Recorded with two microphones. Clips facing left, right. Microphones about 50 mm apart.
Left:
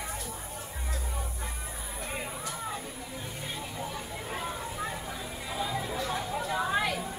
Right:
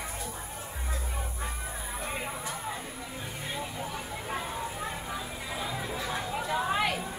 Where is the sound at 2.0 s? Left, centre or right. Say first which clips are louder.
Right 1 dB; centre.